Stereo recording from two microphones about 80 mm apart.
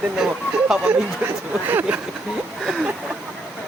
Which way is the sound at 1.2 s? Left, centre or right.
Right.